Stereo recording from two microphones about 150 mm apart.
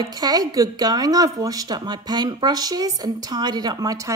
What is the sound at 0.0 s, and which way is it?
A woman's voice, 25° right (ahead or behind).